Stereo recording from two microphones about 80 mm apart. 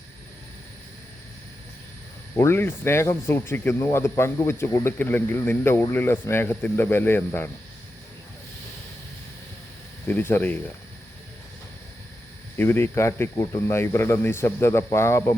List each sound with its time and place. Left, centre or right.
2.3 s speech: left
10.1 s speech: left
12.5 s speech: left